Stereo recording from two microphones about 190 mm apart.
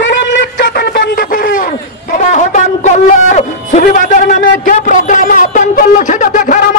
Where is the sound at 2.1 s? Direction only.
40° left (ahead or behind).